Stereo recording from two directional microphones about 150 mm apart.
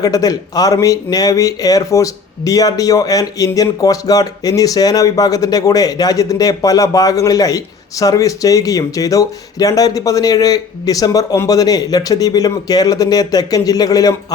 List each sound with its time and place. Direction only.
0.0 s speech: 25° left (ahead or behind)